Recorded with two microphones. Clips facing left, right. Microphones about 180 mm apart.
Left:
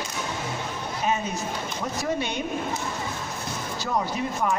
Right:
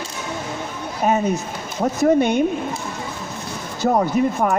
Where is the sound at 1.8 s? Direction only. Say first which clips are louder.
Right 13 dB; 55° right (ahead or behind).